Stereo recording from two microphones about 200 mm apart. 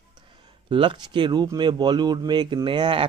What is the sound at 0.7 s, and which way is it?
Speech, 25° right (ahead or behind).